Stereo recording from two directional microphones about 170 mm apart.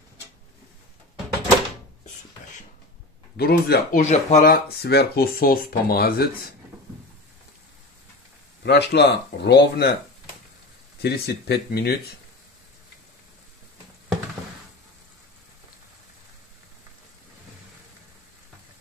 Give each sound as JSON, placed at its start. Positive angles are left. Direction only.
{"t": 3.3, "sound": "speech", "side_deg": 65}
{"t": 4.0, "sound": "speech", "side_deg": 45}
{"t": 4.4, "sound": "speech", "side_deg": 65}
{"t": 8.6, "sound": "speech", "side_deg": 85}
{"t": 11.0, "sound": "speech", "side_deg": 70}